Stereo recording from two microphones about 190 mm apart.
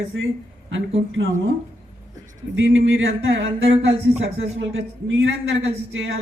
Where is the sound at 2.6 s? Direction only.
70° right (ahead or behind).